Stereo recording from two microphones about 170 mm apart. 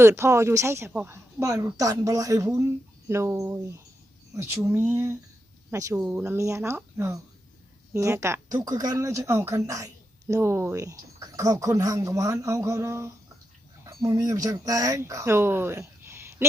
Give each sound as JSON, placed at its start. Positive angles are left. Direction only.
{"t": 0.0, "sound": "speech", "side_deg": -15}